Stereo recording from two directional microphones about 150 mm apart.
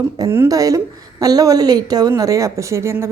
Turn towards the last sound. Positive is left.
turn(degrees=-20)  # may be behind; listen again after turning